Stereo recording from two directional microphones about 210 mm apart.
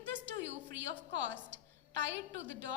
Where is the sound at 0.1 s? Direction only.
60° right (ahead or behind).